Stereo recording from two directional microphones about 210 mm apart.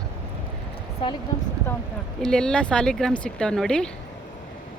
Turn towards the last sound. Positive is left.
turn(degrees=5)  # may be behind; listen again after turning